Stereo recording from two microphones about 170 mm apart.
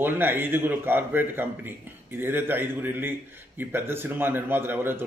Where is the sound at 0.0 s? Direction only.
10° right (ahead or behind).